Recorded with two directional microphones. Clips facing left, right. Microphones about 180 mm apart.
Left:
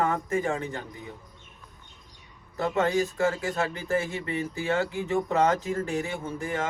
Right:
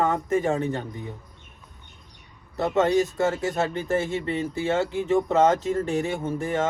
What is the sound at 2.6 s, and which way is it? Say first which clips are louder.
Speech: right 4 dB; 20° right (ahead or behind).